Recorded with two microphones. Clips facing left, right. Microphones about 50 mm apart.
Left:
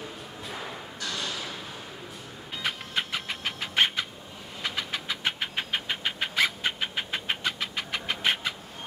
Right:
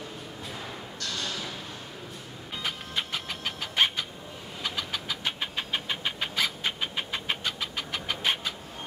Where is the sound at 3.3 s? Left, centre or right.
Left.